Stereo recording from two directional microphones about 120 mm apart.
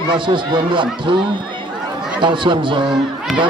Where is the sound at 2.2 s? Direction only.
40° right (ahead or behind).